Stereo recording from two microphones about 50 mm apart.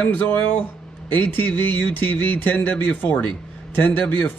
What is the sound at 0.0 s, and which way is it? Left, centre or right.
A man's voice, left.